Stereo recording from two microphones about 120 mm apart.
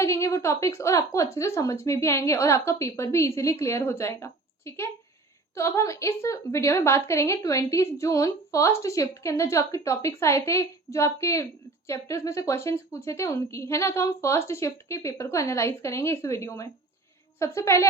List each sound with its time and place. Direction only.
0.0 s a woman's voice: 25° left (ahead or behind)